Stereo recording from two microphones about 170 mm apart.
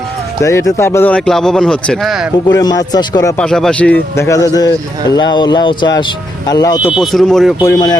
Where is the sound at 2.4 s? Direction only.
25° left (ahead or behind).